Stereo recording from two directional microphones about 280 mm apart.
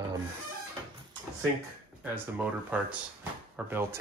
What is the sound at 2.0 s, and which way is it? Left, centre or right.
Speech, centre.